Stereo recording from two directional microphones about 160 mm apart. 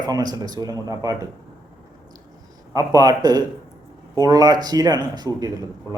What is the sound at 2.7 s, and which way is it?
Speech, 20° right (ahead or behind).